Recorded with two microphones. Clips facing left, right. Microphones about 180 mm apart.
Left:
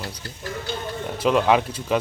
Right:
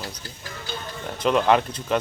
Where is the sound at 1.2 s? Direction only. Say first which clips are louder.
Left 1 dB; 5° left (ahead or behind).